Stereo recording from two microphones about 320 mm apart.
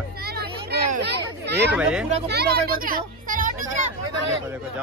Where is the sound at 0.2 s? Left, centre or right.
Right.